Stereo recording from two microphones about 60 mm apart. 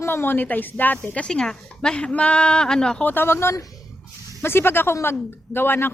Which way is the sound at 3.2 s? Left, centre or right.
Left.